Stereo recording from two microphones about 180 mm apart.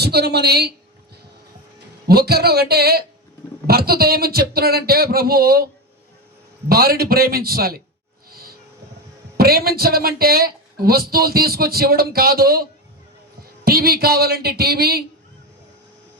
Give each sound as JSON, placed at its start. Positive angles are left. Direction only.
{"t": 0.0, "sound": "a woman's voice", "side_deg": -65}
{"t": 2.0, "sound": "a woman's voice", "side_deg": -60}
{"t": 6.7, "sound": "a woman's voice", "side_deg": -55}
{"t": 8.3, "sound": "a sound", "side_deg": -55}
{"t": 9.4, "sound": "a woman's voice", "side_deg": -55}